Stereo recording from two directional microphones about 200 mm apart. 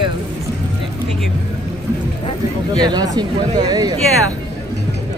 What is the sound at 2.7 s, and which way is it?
Speech, 20° right (ahead or behind).